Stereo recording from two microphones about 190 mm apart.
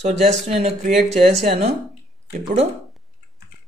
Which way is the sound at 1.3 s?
35° right (ahead or behind).